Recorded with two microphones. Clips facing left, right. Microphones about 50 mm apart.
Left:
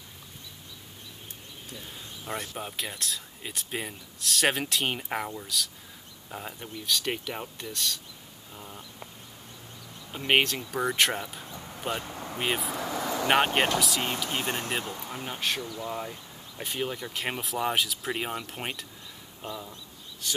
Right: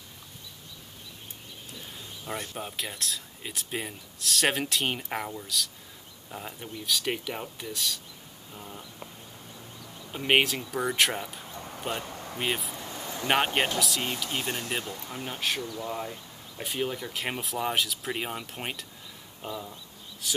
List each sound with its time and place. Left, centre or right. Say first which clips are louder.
2.5 s speech: even; centre
10.1 s speech: even; centre
12.7 s a sound: left 7 dB; left
13.3 s speech: left 1 dB; centre
14.4 s speech: left 2 dB; left
14.7 s speech: left 1 dB; centre
19.4 s bird: right 1 dB; centre